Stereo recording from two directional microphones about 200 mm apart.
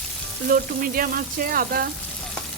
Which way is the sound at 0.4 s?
45° right (ahead or behind).